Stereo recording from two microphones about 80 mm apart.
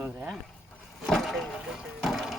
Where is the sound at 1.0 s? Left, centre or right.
Centre.